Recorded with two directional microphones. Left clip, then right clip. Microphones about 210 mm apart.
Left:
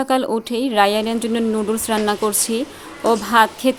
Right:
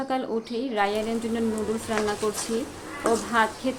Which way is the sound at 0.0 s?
55° left (ahead or behind).